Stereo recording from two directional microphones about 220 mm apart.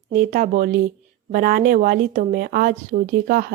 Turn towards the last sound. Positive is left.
turn(degrees=-40)  # may be behind; listen again after turning